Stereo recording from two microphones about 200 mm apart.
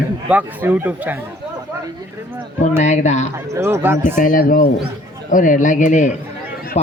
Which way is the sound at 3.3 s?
10° right (ahead or behind).